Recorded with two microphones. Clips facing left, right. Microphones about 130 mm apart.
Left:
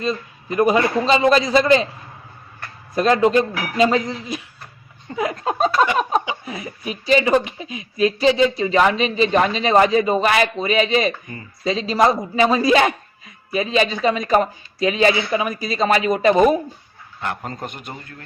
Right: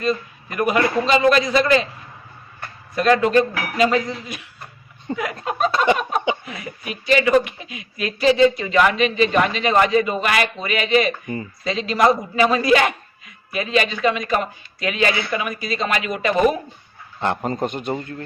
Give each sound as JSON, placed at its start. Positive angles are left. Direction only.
{"t": 0.0, "sound": "a man's voice", "side_deg": 30}
{"t": 2.9, "sound": "a man's voice", "side_deg": 35}
{"t": 5.7, "sound": "a man's voice", "side_deg": -25}
{"t": 6.4, "sound": "speech", "side_deg": 30}
{"t": 17.2, "sound": "a man's voice", "side_deg": -25}